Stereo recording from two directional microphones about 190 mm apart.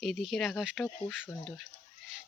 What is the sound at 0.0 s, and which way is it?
Speech, centre (ahead or behind).